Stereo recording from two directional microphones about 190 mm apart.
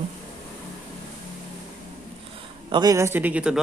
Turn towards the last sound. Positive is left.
turn(degrees=-5)  # may be behind; listen again after turning